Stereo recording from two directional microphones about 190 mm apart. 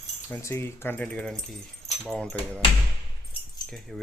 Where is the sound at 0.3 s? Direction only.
10° left (ahead or behind).